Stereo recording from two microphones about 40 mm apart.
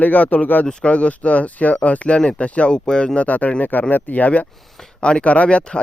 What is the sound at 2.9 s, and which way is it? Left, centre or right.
Speech, left.